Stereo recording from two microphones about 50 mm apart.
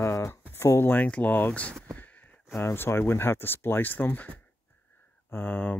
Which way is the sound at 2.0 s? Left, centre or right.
Left.